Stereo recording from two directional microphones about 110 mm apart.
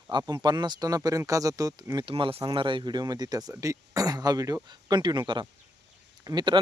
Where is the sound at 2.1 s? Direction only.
55° right (ahead or behind).